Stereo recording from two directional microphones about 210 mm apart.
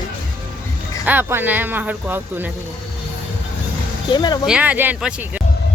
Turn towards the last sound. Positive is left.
turn(degrees=-10)  # may be behind; listen again after turning